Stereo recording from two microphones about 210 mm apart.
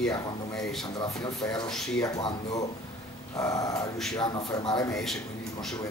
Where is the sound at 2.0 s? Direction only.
20° left (ahead or behind).